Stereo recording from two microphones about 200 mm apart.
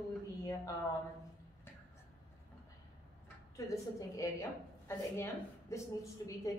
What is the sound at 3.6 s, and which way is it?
A woman's voice, 15° left (ahead or behind).